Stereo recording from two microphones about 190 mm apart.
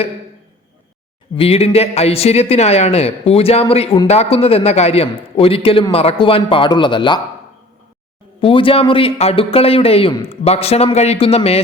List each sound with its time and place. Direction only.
1.4 s speech: 30° left (ahead or behind)
8.4 s speech: 30° left (ahead or behind)